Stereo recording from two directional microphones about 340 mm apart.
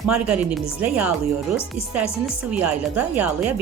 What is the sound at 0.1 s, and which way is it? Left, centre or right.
A woman's voice, centre.